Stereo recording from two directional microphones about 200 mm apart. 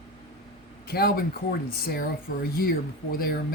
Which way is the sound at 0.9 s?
50° left (ahead or behind).